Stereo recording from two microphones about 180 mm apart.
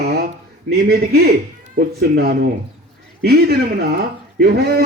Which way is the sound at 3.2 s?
60° right (ahead or behind).